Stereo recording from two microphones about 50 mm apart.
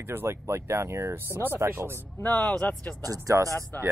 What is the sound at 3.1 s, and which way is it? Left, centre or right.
Speech, right.